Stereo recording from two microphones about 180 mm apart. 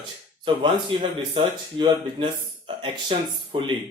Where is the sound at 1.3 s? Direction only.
25° right (ahead or behind).